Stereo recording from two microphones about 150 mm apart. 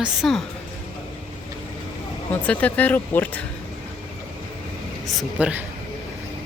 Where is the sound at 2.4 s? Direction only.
10° left (ahead or behind).